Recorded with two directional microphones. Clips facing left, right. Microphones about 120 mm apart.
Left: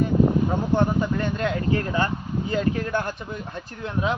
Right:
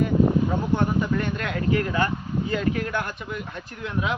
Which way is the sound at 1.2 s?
30° left (ahead or behind).